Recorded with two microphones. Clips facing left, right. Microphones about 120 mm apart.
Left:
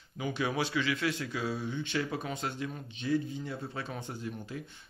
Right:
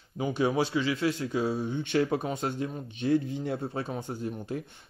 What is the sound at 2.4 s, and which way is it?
Speech, 40° right (ahead or behind).